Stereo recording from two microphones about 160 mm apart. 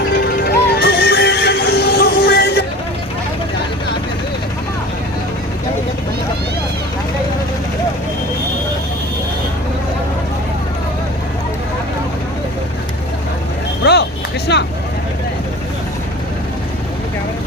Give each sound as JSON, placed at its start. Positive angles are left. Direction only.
{"t": 0.3, "sound": "music", "side_deg": 90}
{"t": 13.8, "sound": "vehicle", "side_deg": 80}
{"t": 14.5, "sound": "vehicle", "side_deg": 90}